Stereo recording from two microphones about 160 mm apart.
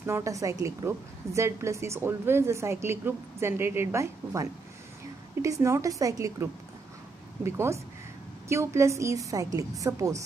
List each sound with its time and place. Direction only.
0.0 s a woman's voice: 20° right (ahead or behind)